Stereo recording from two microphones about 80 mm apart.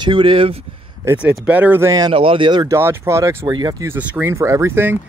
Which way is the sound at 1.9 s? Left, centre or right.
Right.